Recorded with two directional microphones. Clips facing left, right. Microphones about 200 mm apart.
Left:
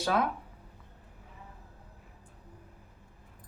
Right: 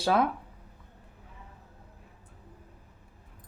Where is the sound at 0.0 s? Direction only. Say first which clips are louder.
Right 3 dB; 30° right (ahead or behind).